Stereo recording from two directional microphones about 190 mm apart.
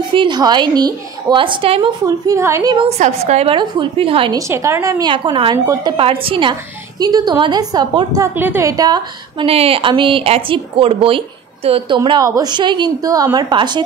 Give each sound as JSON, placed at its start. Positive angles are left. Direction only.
{"t": 0.1, "sound": "a woman's voice", "side_deg": -25}
{"t": 2.9, "sound": "a woman's voice", "side_deg": -35}
{"t": 4.4, "sound": "a woman's voice", "side_deg": -15}